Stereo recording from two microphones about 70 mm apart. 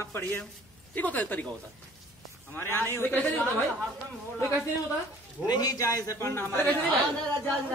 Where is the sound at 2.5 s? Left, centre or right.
Left.